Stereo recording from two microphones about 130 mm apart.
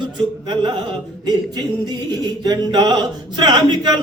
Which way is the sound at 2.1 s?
30° right (ahead or behind).